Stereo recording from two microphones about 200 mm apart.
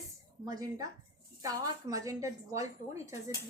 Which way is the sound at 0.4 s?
15° right (ahead or behind).